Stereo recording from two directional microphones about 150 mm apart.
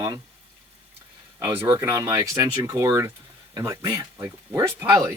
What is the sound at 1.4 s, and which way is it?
Speech, 15° right (ahead or behind).